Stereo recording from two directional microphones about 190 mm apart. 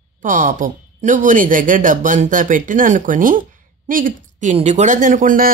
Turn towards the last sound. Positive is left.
turn(degrees=-45)  # may be behind; listen again after turning